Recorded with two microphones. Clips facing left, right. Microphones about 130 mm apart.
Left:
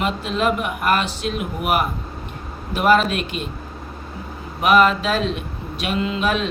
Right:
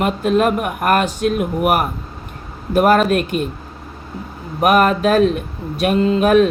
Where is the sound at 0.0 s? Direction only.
50° right (ahead or behind).